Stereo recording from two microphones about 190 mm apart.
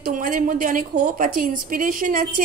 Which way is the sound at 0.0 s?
45° right (ahead or behind).